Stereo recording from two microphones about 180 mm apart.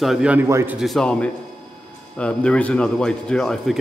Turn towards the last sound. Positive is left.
turn(degrees=0)  # may be behind; listen again after turning